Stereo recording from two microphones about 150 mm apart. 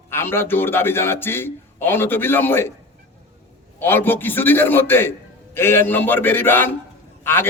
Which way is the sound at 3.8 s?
15° left (ahead or behind).